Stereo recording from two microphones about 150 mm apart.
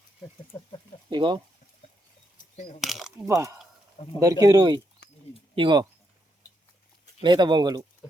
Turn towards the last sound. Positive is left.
turn(degrees=-30)  # may be behind; listen again after turning